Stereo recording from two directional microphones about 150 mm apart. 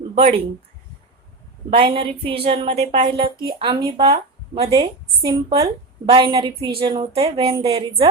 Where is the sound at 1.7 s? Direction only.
35° right (ahead or behind).